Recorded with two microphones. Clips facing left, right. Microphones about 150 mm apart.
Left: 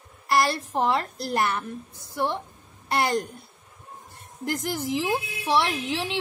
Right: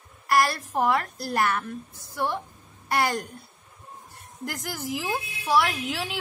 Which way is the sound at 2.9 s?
25° left (ahead or behind).